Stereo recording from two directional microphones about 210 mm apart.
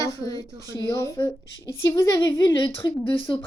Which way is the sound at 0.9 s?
15° left (ahead or behind).